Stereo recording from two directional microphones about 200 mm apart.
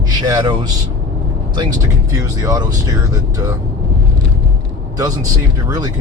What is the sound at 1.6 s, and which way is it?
Speech, 15° right (ahead or behind).